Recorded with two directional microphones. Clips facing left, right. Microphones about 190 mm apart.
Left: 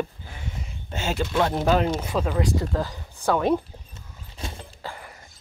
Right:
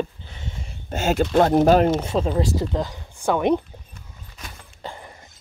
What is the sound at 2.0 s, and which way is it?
Speech, 25° right (ahead or behind).